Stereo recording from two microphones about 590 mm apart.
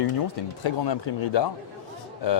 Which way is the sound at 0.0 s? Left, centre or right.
Left.